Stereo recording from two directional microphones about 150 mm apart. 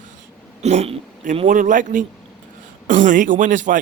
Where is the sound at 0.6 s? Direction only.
45° right (ahead or behind).